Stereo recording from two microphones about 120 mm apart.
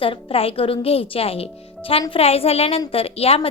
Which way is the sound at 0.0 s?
50° left (ahead or behind).